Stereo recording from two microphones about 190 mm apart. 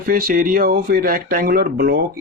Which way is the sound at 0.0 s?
50° right (ahead or behind).